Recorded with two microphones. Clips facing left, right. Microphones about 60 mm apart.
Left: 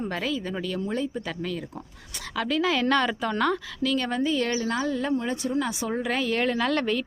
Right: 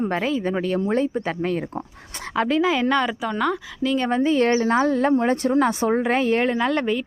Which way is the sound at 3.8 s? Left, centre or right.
Right.